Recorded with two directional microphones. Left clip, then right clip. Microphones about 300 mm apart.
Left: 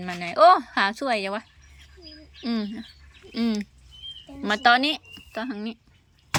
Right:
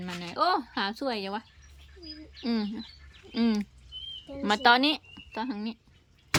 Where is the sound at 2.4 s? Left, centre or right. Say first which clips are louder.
Left 2 dB; centre.